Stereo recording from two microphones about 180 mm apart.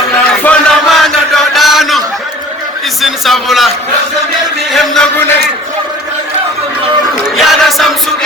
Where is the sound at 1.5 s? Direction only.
Centre (ahead or behind).